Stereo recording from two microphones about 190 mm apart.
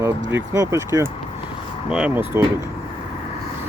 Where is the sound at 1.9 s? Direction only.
5° right (ahead or behind).